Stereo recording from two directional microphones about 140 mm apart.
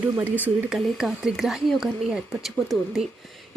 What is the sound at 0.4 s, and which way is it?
A woman's voice, 5° right (ahead or behind).